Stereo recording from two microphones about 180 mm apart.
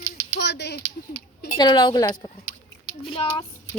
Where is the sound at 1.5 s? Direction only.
25° left (ahead or behind).